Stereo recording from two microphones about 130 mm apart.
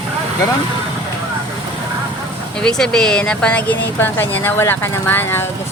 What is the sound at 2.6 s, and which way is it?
Speech, 5° left (ahead or behind).